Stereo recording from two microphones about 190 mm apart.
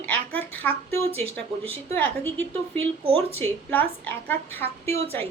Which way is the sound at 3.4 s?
10° left (ahead or behind).